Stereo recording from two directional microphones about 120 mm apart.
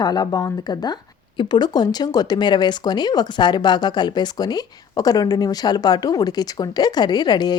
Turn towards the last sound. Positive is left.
turn(degrees=35)  # may be behind; listen again after turning